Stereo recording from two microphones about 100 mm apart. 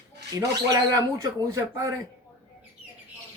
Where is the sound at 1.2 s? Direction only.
35° right (ahead or behind).